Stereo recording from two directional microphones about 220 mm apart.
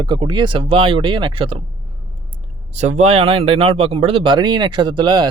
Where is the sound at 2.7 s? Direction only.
30° right (ahead or behind).